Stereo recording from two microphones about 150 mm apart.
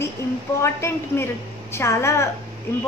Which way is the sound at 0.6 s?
15° left (ahead or behind).